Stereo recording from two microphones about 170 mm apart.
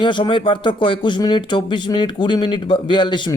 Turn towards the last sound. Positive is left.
turn(degrees=30)  # may be behind; listen again after turning